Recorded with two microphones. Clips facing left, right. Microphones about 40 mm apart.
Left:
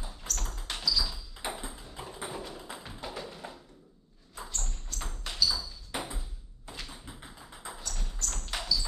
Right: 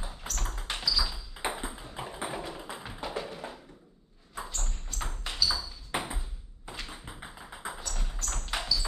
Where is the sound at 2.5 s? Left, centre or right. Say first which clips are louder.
Right 3 dB; centre.